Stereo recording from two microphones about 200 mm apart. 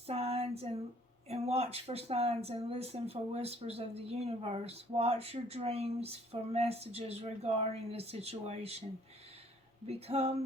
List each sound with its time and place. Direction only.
0.1 s a sound: 30° right (ahead or behind)
1.3 s speech: 30° right (ahead or behind)
9.8 s speech: 30° right (ahead or behind)